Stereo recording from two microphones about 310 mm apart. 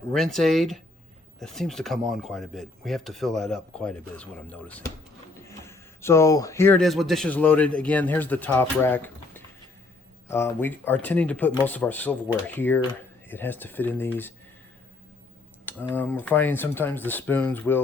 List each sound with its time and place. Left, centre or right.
0.1 s speech: centre
15.6 s speech: centre